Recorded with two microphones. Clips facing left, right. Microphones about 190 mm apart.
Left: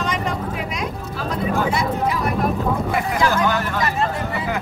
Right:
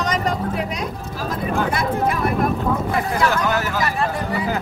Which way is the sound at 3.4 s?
5° right (ahead or behind).